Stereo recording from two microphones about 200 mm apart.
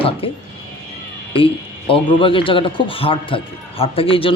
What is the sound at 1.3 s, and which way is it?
Speech, 25° left (ahead or behind).